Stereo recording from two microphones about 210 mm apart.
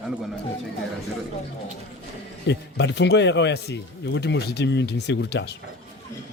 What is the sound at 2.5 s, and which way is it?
Speech, 55° left (ahead or behind).